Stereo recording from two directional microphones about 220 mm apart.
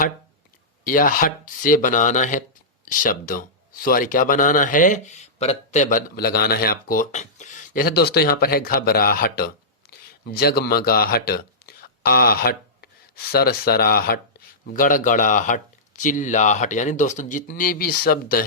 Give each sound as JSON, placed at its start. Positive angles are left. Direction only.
{"t": 0.9, "sound": "speech", "side_deg": 40}